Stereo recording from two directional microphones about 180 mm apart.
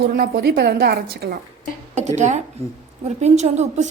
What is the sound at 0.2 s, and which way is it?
A woman's voice, 65° right (ahead or behind).